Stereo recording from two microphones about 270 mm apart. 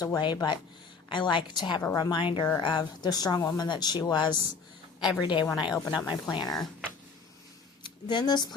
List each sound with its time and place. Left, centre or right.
0.0 s a woman's voice: centre
7.9 s speech: centre